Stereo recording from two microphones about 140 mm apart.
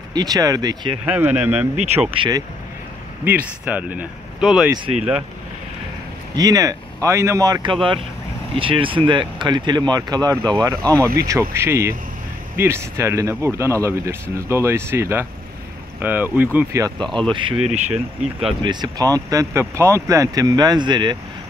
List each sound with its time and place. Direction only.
0.1 s speech: 30° right (ahead or behind)
1.0 s speech: 10° right (ahead or behind)
2.0 s speech: 35° right (ahead or behind)
3.3 s speech: 10° right (ahead or behind)
6.3 s speech: 25° right (ahead or behind)
8.5 s speech: 40° right (ahead or behind); by 16.4 s 15° right (ahead or behind)
16.5 s speech: 25° right (ahead or behind)
17.9 s speech: 5° right (ahead or behind)
18.6 s speech: 30° right (ahead or behind)